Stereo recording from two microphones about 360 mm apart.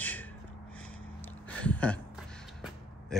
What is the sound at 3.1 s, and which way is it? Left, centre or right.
Speech, centre.